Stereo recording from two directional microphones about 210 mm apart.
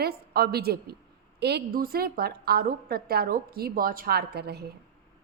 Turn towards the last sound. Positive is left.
turn(degrees=-50)  # may be behind; listen again after turning